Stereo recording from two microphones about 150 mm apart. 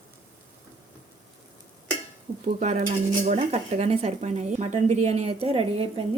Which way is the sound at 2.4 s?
50° right (ahead or behind).